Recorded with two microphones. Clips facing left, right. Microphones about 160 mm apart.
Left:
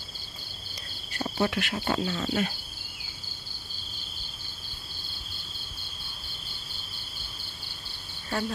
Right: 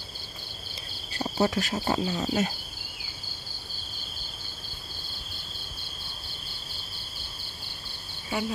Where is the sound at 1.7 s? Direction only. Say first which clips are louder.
Right 1 dB; 25° right (ahead or behind).